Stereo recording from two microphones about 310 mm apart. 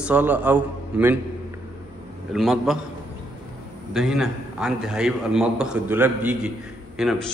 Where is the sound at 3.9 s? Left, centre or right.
Centre.